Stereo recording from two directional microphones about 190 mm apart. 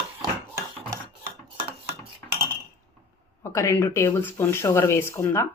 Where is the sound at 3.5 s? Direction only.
15° left (ahead or behind).